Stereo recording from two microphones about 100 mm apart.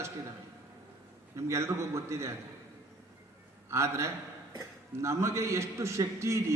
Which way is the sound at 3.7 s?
30° right (ahead or behind).